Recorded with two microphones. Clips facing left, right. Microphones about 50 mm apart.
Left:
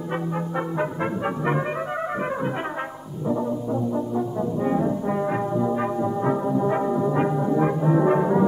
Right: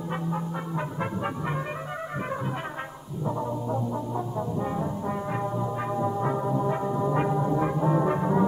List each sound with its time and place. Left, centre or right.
4.6 s brass instrument: left
5.1 s music: centre
6.7 s music: left
7.0 s music: centre